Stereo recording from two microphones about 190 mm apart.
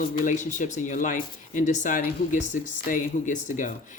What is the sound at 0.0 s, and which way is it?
Speech, 40° left (ahead or behind).